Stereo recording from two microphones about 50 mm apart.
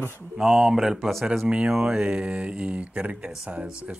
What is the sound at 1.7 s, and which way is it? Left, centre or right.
Speech, centre.